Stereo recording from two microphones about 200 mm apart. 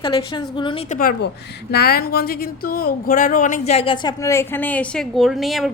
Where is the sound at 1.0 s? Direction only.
50° left (ahead or behind).